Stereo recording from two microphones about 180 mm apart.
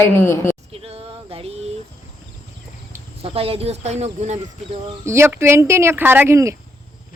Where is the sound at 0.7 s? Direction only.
35° right (ahead or behind).